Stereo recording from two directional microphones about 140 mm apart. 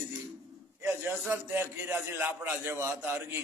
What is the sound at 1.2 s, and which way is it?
A man's voice, 20° right (ahead or behind).